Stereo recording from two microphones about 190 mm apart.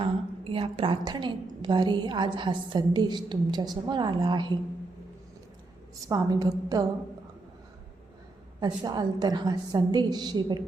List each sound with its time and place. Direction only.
0.5 s a woman's voice: 25° right (ahead or behind)
6.1 s a woman's voice: 20° right (ahead or behind)
8.6 s a woman's voice: 20° right (ahead or behind)